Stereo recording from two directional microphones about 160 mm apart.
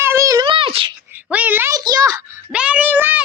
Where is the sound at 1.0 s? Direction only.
10° right (ahead or behind).